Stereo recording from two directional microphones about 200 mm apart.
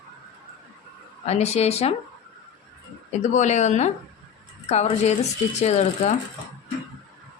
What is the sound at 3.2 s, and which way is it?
A woman's voice, 35° left (ahead or behind).